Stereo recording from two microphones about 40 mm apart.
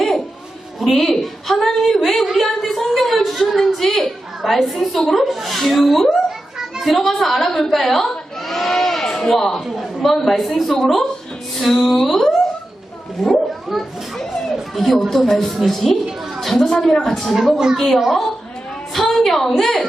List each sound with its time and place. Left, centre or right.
0.8 s a woman's voice: centre
11.5 s music: centre
13.2 s a child's voice: centre
16.9 s music: centre
17.3 s a woman's voice: centre
17.7 s music: centre
18.9 s a sound: centre